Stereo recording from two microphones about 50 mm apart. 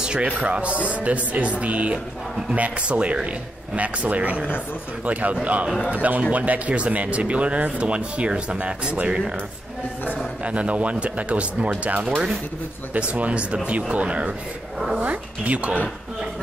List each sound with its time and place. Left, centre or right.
0.0 s music: centre
0.3 s a man's voice: right
10.4 s speech: right